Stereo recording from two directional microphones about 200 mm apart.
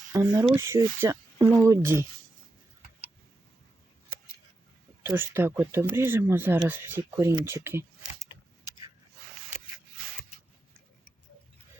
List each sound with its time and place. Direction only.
0.1 s speech: 15° right (ahead or behind)
5.0 s speech: 10° right (ahead or behind)
8.3 s a sound: 25° left (ahead or behind)